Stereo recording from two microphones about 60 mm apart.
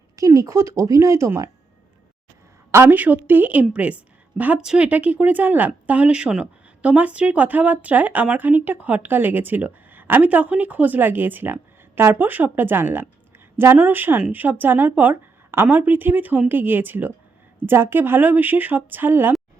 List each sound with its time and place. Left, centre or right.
0.2 s speech: right
2.9 s a woman's voice: right